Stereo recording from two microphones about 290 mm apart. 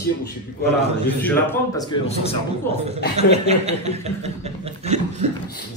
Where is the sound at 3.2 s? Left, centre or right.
Right.